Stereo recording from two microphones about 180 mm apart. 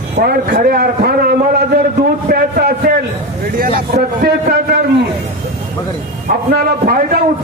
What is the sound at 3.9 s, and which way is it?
Speech, 55° right (ahead or behind).